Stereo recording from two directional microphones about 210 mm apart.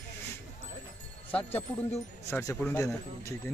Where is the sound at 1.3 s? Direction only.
10° left (ahead or behind).